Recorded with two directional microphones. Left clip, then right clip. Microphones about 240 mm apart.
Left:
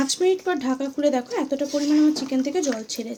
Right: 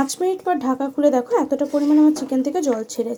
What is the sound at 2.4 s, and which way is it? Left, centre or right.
Speech, centre.